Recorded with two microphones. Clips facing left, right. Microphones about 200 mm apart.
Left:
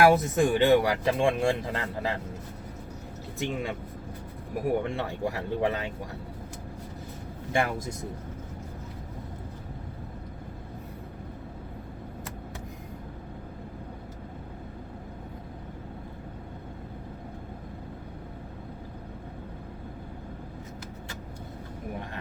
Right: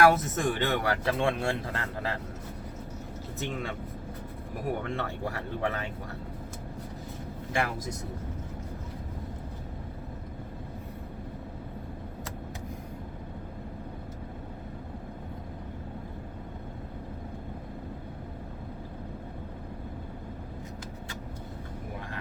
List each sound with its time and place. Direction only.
0.0 s speech: 15° left (ahead or behind)
3.3 s speech: 15° left (ahead or behind)
4.8 s speech: 15° left (ahead or behind)